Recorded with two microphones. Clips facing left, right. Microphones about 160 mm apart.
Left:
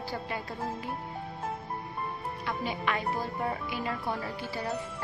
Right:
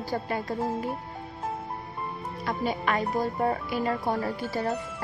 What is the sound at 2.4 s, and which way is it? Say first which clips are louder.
Speech: right 5 dB; 40° right (ahead or behind).